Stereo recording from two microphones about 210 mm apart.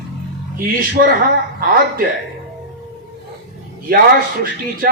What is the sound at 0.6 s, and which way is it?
Speech, 45° right (ahead or behind).